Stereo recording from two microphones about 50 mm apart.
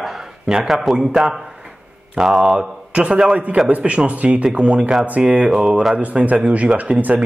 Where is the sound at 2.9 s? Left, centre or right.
Centre.